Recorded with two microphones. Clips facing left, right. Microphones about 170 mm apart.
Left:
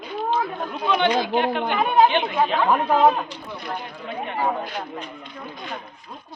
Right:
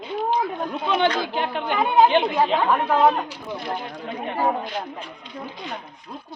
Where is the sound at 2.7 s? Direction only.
15° left (ahead or behind).